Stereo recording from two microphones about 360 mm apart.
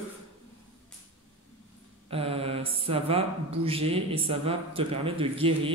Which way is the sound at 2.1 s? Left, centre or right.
Centre.